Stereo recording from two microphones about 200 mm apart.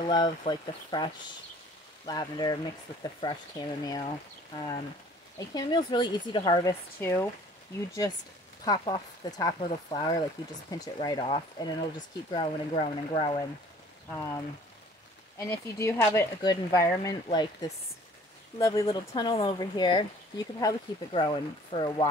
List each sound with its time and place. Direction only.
0.0 s speech: 25° left (ahead or behind)
5.4 s speech: 20° left (ahead or behind)
8.6 s speech: 25° left (ahead or behind)